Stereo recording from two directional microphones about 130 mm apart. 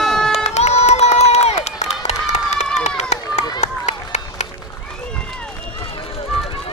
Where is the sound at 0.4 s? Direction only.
60° left (ahead or behind).